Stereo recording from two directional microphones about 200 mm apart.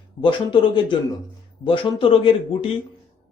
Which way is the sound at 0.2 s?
25° left (ahead or behind).